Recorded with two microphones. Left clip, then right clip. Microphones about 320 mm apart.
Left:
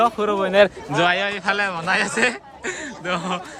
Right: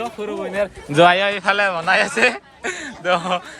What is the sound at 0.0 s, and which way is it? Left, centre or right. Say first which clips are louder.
A man's voice: left 7 dB; centre.